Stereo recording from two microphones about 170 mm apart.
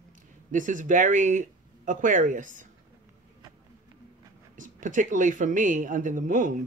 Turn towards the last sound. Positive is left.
turn(degrees=-50)  # may be behind; listen again after turning